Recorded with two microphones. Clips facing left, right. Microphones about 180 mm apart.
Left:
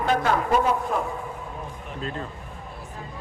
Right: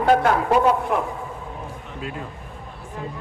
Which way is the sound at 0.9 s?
60° right (ahead or behind).